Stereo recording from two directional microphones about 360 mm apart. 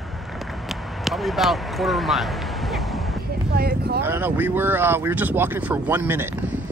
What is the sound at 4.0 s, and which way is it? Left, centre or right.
Speech, centre.